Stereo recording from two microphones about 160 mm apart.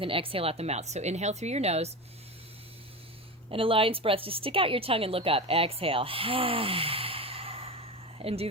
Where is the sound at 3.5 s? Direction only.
35° right (ahead or behind).